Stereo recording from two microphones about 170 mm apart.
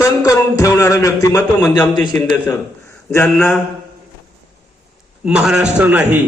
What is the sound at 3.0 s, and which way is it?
Speech, 5° left (ahead or behind).